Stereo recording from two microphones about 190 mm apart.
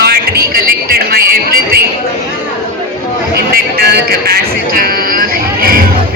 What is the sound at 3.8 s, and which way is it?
Speech, 55° right (ahead or behind).